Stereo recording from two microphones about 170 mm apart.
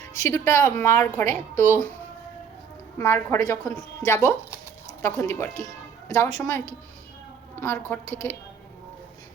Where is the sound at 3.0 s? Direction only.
15° left (ahead or behind).